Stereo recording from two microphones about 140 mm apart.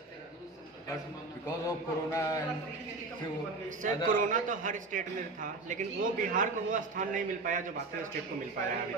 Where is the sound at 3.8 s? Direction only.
70° right (ahead or behind).